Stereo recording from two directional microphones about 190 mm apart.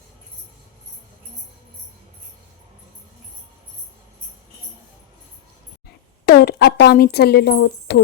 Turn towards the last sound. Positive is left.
turn(degrees=60)  # may be behind; listen again after turning